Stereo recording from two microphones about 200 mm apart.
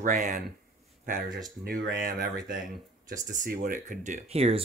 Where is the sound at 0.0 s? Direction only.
40° right (ahead or behind).